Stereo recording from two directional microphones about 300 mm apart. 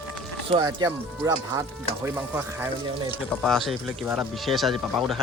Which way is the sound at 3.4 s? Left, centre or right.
Centre.